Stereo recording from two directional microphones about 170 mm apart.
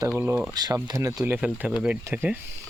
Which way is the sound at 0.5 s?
20° right (ahead or behind).